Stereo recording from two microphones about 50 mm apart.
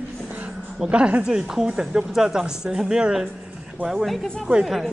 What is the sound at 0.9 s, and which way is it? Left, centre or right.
A woman's voice, right.